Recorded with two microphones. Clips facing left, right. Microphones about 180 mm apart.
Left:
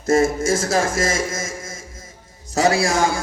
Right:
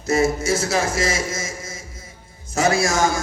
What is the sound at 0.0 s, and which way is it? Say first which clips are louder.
A man's voice: left 2 dB; 50° left (ahead or behind).